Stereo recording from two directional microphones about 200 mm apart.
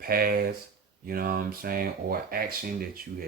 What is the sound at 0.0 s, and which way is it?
Speech, 45° right (ahead or behind).